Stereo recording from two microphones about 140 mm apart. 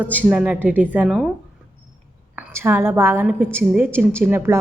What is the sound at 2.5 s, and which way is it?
A woman's voice, 15° right (ahead or behind).